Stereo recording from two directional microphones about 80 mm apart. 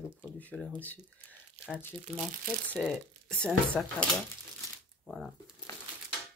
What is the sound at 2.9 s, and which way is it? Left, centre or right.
Speech, centre.